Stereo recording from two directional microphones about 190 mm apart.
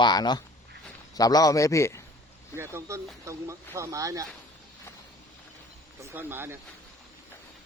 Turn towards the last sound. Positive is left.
turn(degrees=-10)  # may be behind; listen again after turning